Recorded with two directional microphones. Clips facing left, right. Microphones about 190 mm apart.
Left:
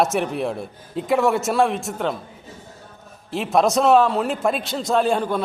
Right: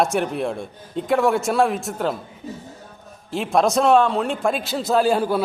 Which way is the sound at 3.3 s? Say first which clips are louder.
Even; centre (ahead or behind).